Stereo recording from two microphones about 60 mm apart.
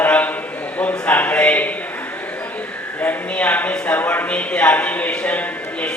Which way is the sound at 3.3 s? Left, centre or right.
Left.